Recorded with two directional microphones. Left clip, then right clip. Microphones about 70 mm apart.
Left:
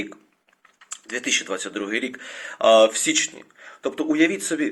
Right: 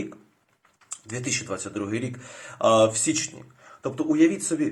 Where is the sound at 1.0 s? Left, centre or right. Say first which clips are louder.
Left 6 dB; right.